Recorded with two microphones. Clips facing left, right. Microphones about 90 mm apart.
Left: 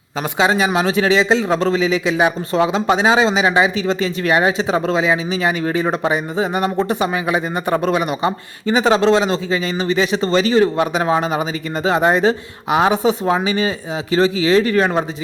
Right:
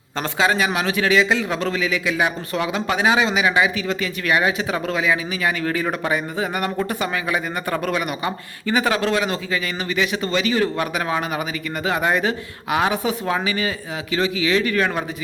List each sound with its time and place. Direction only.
0.3 s a man's voice: 25° left (ahead or behind)